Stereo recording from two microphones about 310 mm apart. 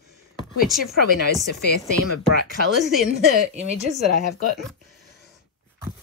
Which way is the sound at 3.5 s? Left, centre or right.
Right.